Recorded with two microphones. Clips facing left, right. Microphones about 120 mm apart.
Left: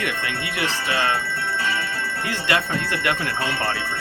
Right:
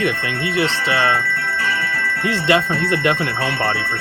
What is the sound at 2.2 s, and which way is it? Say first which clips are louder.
Speech: right 7 dB; 25° right (ahead or behind).